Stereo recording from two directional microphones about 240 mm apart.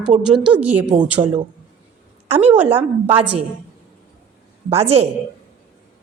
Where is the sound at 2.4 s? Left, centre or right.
Centre.